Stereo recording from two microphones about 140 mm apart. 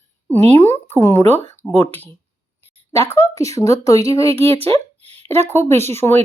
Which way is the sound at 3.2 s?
20° left (ahead or behind).